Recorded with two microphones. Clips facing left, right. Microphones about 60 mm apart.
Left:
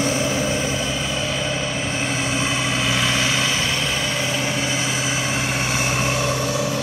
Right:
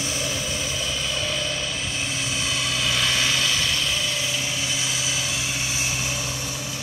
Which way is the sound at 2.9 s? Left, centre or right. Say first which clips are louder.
Left 1 dB; left.